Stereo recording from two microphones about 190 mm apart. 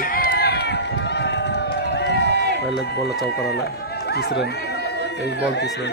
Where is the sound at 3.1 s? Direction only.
60° left (ahead or behind).